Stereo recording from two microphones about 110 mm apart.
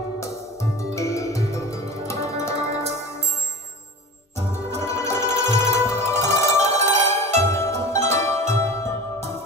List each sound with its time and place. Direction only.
0.2 s music: 25° left (ahead or behind)
4.4 s music: 25° left (ahead or behind)
6.1 s zither: 25° left (ahead or behind)
8.1 s music: 25° left (ahead or behind)